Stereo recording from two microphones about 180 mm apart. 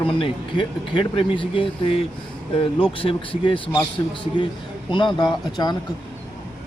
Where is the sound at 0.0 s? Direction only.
30° left (ahead or behind).